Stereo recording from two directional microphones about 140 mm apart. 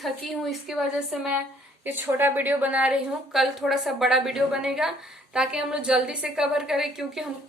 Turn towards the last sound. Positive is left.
turn(degrees=-5)  # may be behind; listen again after turning